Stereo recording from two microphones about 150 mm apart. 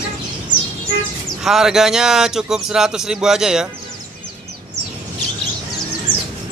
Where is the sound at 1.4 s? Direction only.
5° right (ahead or behind).